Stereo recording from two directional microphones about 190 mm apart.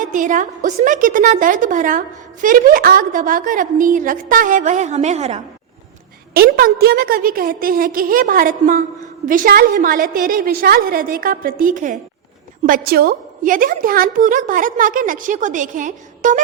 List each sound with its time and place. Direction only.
0.0 s a woman's voice: 40° right (ahead or behind)
6.3 s a woman's voice: 50° right (ahead or behind)